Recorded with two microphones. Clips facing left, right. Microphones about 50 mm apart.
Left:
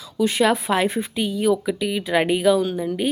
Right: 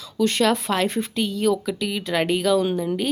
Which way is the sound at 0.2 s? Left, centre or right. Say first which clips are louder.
Left 1 dB; centre.